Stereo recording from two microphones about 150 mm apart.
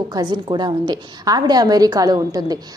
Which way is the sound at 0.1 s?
30° right (ahead or behind).